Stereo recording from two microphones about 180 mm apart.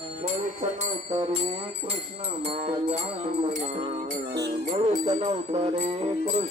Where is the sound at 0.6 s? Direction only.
35° right (ahead or behind).